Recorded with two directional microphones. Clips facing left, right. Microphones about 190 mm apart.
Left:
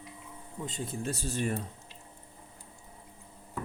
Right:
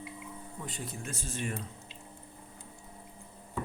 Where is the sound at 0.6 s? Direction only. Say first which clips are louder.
Left 6 dB; 25° left (ahead or behind).